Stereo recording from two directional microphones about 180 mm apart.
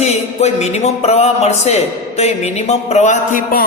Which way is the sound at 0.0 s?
40° left (ahead or behind).